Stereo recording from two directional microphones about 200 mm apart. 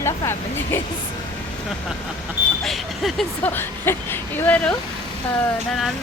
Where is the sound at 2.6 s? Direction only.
Centre (ahead or behind).